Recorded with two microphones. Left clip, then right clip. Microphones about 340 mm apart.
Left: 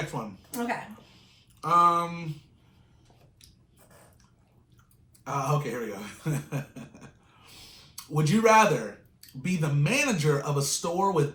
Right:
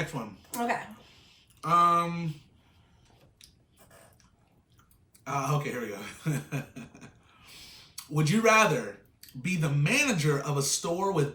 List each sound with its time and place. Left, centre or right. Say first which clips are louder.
0.1 s speech: left 3 dB; centre
0.5 s speech: right 2 dB; centre
0.9 s a sound: even; centre
5.2 s speech: left 2 dB; centre